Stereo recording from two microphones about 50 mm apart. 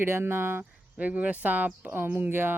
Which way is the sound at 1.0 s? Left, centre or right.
Right.